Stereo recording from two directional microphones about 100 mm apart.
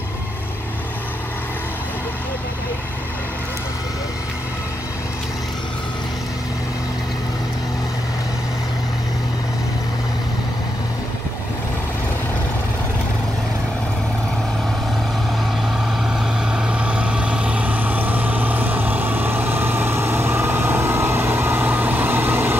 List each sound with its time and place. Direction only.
16.5 s vehicle: 10° right (ahead or behind)